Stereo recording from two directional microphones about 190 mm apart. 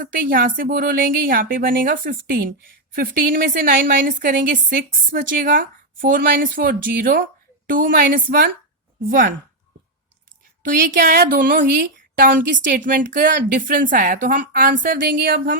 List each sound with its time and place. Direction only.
0.0 s a woman's voice: 45° right (ahead or behind)
10.7 s a woman's voice: 50° right (ahead or behind)